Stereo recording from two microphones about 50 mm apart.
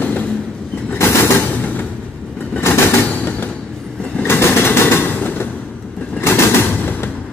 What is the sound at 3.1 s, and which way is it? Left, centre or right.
Music, left.